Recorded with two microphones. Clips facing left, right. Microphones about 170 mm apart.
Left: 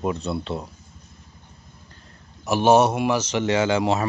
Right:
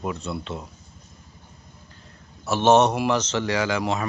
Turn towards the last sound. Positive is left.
turn(degrees=30)  # may be behind; listen again after turning